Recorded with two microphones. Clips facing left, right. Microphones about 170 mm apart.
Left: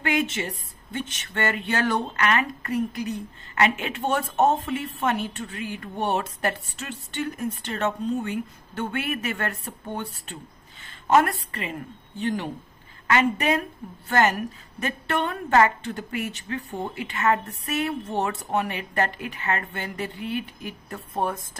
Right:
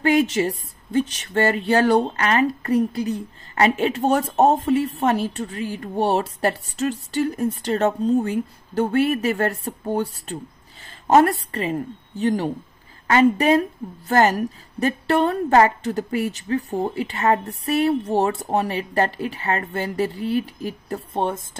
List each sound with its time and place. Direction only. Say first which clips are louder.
0.0 s a woman's voice: right 7 dB; 35° right (ahead or behind)